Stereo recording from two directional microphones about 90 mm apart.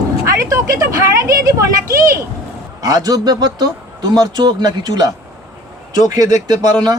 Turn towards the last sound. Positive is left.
turn(degrees=-45)  # may be behind; listen again after turning